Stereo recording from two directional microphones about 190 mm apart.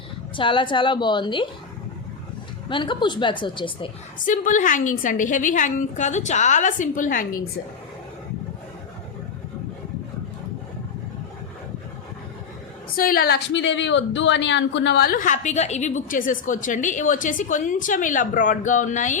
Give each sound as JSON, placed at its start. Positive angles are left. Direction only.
{"t": 0.3, "sound": "a woman's voice", "side_deg": 25}
{"t": 2.6, "sound": "a woman's voice", "side_deg": 25}
{"t": 4.3, "sound": "a woman's voice", "side_deg": 45}
{"t": 13.0, "sound": "a woman's voice", "side_deg": 50}